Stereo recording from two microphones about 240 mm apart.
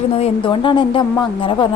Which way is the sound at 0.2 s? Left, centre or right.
Left.